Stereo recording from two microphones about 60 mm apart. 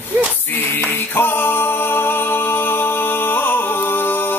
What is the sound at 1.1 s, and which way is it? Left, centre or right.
Music, left.